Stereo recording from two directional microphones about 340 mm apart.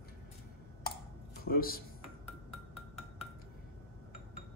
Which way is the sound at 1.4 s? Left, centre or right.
Left.